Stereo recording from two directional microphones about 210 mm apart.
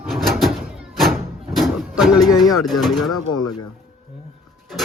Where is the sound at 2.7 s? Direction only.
Centre (ahead or behind).